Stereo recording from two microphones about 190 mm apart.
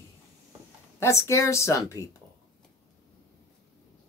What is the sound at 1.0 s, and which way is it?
Speech, 15° left (ahead or behind).